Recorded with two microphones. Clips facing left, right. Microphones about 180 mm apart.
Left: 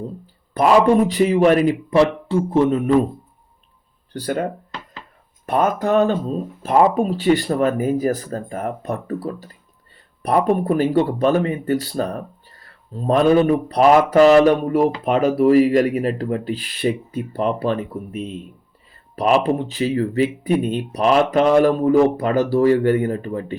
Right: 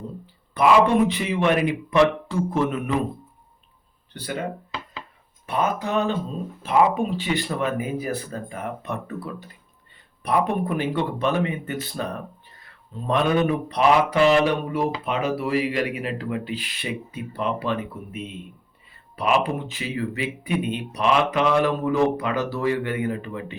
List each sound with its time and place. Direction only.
0.5 s speech: 40° left (ahead or behind)
4.1 s speech: 45° left (ahead or behind)
5.5 s speech: 45° left (ahead or behind)